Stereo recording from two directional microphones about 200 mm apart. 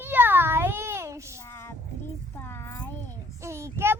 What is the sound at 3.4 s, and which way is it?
Child singing, 15° right (ahead or behind).